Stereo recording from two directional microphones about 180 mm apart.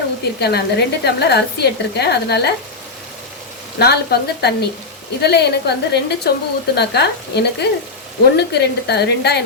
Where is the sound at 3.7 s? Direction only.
65° left (ahead or behind).